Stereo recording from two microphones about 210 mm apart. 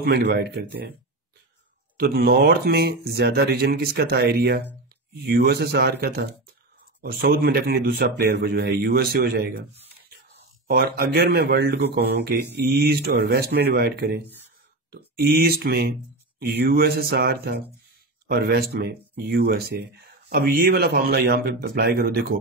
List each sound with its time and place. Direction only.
0.0 s speech: 50° right (ahead or behind)
2.0 s speech: 50° right (ahead or behind)
10.7 s speech: 45° right (ahead or behind)